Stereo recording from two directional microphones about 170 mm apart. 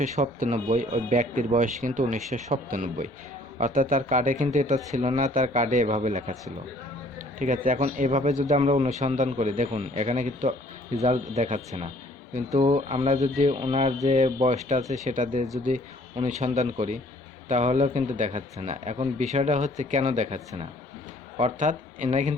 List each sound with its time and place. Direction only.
0.0 s a man's voice: 50° right (ahead or behind)